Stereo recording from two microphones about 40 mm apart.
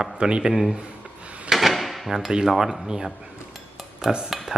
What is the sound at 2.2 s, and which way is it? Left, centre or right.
Speech, centre.